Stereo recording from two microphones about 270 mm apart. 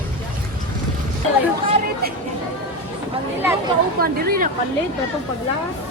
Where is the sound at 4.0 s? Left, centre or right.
Right.